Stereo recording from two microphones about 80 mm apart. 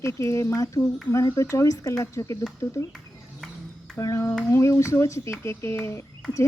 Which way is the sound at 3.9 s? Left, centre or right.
Left.